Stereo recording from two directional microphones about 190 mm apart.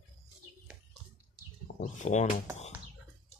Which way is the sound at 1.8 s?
40° left (ahead or behind).